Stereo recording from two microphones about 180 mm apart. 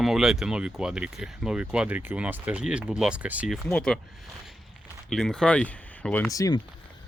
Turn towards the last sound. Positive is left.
turn(degrees=20)  # may be behind; listen again after turning